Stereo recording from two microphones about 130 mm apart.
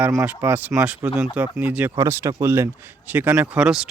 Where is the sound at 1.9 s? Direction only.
20° right (ahead or behind).